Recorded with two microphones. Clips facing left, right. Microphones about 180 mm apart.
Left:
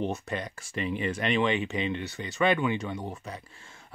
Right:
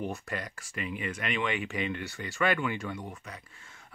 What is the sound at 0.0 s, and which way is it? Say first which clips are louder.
Speech: left 4 dB; 25° left (ahead or behind).